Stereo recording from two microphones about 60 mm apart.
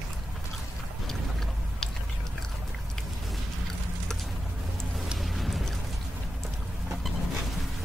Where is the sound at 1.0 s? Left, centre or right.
Centre.